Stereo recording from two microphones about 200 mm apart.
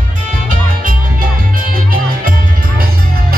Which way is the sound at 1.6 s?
45° right (ahead or behind).